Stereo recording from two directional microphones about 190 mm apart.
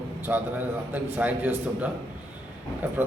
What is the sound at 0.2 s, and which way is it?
A man's voice, 10° right (ahead or behind).